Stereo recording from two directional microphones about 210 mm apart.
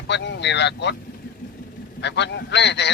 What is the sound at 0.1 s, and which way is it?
Speech, 55° left (ahead or behind).